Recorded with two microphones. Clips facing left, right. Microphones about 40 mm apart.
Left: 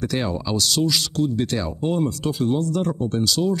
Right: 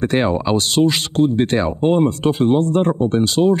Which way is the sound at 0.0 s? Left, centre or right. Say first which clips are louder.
Right 7 dB; right.